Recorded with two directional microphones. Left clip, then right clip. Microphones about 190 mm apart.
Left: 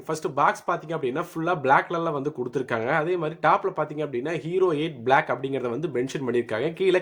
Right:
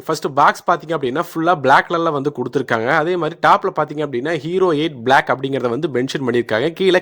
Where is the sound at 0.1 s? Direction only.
45° right (ahead or behind).